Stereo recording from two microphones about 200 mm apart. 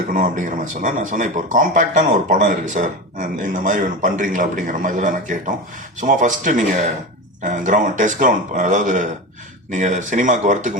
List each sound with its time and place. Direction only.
0.1 s speech: 40° right (ahead or behind)